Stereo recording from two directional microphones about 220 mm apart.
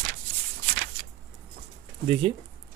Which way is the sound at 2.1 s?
25° right (ahead or behind).